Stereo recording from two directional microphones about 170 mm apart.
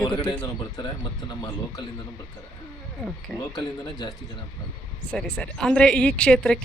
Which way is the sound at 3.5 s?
25° left (ahead or behind).